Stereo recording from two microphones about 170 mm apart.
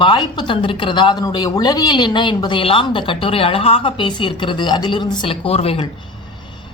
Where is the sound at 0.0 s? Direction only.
25° left (ahead or behind).